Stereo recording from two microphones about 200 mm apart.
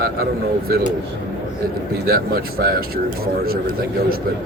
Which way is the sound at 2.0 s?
50° right (ahead or behind).